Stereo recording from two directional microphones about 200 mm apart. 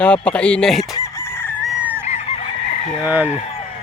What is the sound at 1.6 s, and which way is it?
Chicken, 5° right (ahead or behind).